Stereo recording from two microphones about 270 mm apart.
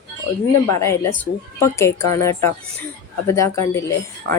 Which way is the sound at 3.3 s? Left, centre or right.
Centre.